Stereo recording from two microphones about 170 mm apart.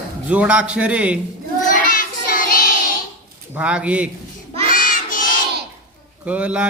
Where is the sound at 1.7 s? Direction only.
55° left (ahead or behind).